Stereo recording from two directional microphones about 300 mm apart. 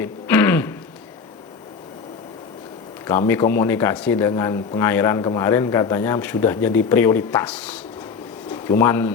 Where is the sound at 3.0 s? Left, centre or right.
Centre.